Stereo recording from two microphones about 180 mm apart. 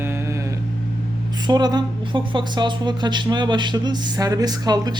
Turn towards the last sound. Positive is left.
turn(degrees=-20)  # may be behind; listen again after turning